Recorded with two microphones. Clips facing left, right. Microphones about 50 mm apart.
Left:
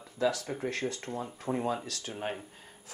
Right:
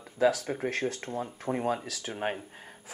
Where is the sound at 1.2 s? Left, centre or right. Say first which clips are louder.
Right 2 dB; centre.